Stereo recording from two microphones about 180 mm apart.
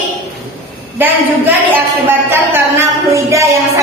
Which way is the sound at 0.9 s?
10° right (ahead or behind).